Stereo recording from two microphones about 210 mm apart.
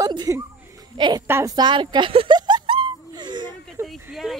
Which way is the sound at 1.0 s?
15° right (ahead or behind).